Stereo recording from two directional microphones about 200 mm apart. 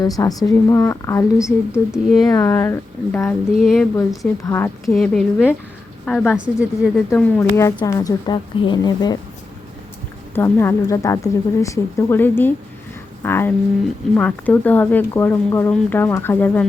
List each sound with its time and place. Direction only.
0.0 s speech: 20° left (ahead or behind)
1.9 s speech: centre (ahead or behind)
2.2 s speech: 15° left (ahead or behind)
3.5 s speech: centre (ahead or behind)
4.4 s speech: 10° left (ahead or behind)
4.9 s speech: centre (ahead or behind)
7.2 s speech: 10° left (ahead or behind)
10.3 s speech: 10° left (ahead or behind)